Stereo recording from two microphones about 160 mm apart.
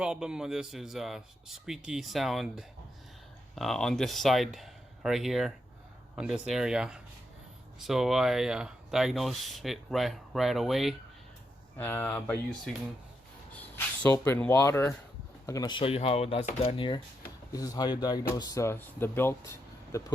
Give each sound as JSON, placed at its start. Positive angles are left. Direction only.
{"t": 0.0, "sound": "speech", "side_deg": -5}
{"t": 11.8, "sound": "speech", "side_deg": 10}